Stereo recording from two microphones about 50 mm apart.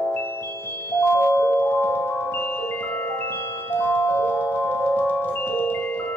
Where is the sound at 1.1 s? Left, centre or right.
Left.